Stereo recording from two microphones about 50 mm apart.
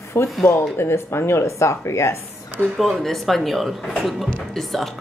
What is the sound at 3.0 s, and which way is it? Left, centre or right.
Speech, centre.